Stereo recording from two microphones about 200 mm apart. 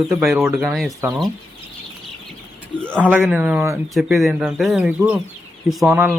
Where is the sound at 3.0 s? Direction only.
10° right (ahead or behind).